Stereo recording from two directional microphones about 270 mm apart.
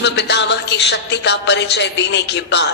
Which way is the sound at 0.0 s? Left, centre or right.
Left.